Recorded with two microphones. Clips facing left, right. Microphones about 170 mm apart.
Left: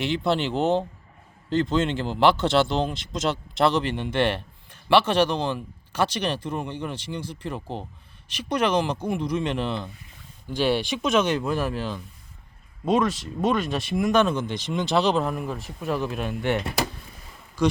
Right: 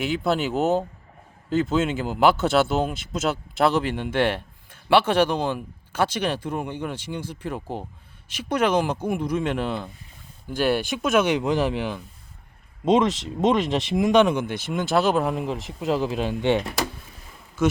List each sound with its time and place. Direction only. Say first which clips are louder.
0.0 s speech: right 1 dB; 5° right (ahead or behind)
15.3 s speech: right 3 dB; 20° right (ahead or behind)